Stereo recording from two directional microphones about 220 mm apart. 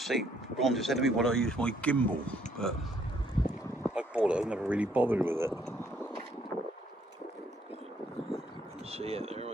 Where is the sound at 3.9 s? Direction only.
5° right (ahead or behind).